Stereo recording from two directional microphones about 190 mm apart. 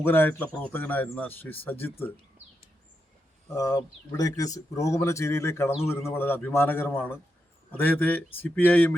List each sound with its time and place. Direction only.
0.0 s speech: 10° left (ahead or behind)
3.5 s speech: 20° left (ahead or behind)